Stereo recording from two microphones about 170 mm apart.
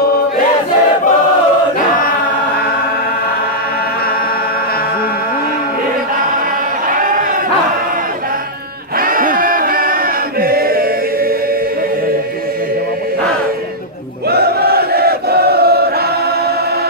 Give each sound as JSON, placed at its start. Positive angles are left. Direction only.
{"t": 7.0, "sound": "a sound", "side_deg": -50}
{"t": 9.0, "sound": "crowd", "side_deg": -55}
{"t": 10.4, "sound": "chant", "side_deg": -60}
{"t": 14.3, "sound": "chant", "side_deg": -65}